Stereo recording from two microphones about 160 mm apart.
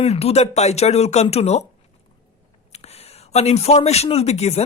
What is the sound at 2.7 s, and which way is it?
A man's voice, 40° left (ahead or behind).